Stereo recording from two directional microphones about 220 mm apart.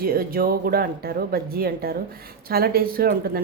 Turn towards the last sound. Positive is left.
turn(degrees=-45)  # may be behind; listen again after turning